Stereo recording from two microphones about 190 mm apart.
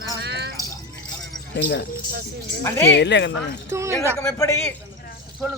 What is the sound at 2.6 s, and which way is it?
Speech, 10° left (ahead or behind).